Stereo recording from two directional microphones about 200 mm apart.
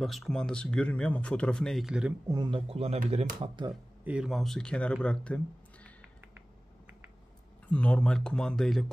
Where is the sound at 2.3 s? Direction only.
20° right (ahead or behind).